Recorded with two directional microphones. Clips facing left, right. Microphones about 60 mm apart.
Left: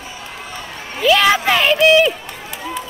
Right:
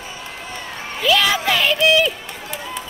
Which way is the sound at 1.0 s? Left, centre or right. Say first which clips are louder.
Left 4 dB; left.